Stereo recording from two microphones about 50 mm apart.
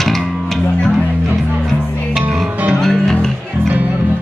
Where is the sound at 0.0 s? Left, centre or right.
Centre.